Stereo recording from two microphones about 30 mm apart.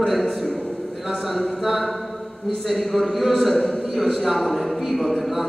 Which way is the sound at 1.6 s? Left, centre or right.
Centre.